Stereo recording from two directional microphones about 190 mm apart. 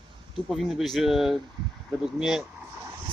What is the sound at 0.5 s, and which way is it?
Speech, centre (ahead or behind).